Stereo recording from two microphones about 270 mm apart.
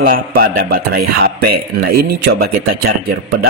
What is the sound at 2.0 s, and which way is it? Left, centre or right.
Speech, right.